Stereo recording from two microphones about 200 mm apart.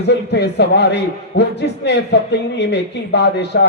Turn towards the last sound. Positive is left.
turn(degrees=55)  # may be behind; listen again after turning